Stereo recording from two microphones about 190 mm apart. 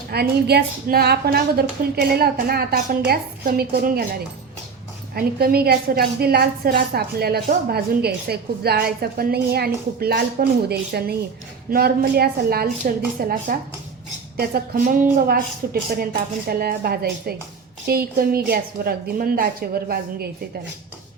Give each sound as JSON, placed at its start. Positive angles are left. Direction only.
{"t": 0.1, "sound": "a woman's voice", "side_deg": -55}